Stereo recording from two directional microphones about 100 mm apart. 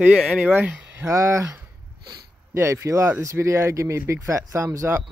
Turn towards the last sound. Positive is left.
turn(degrees=-25)  # may be behind; listen again after turning